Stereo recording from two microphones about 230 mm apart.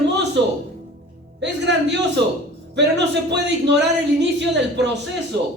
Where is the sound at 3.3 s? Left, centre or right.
Right.